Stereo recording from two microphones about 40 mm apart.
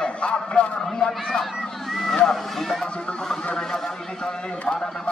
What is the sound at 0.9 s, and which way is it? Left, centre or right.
Speech, centre.